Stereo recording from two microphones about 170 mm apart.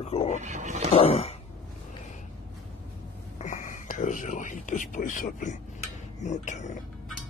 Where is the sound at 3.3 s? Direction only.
50° left (ahead or behind).